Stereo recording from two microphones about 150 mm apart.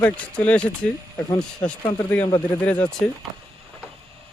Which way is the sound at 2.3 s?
25° left (ahead or behind).